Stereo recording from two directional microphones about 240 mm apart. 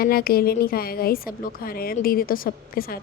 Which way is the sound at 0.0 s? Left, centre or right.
Left.